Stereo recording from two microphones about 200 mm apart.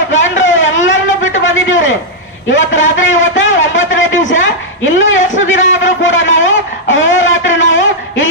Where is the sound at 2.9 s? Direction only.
75° left (ahead or behind).